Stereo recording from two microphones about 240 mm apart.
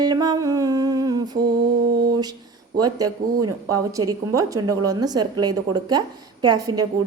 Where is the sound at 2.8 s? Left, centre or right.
Centre.